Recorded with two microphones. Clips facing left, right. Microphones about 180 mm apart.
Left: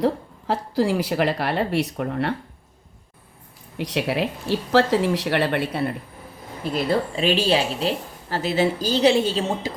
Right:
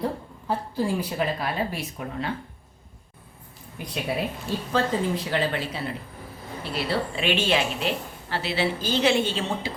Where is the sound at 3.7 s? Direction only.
90° left; by 5.9 s 60° left (ahead or behind).